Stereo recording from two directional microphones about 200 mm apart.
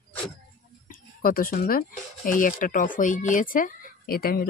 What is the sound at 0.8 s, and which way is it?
Speech, 45° left (ahead or behind).